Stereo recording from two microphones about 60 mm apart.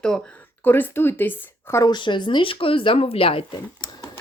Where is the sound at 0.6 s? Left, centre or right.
Left.